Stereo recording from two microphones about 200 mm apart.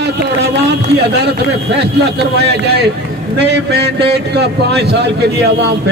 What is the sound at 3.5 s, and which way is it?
A man's voice, 55° right (ahead or behind).